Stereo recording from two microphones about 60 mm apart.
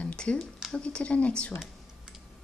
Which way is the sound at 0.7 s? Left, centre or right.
Centre.